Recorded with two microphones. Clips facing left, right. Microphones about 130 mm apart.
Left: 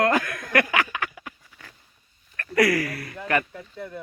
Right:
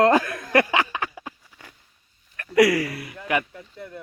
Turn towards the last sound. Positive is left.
turn(degrees=-10)  # may be behind; listen again after turning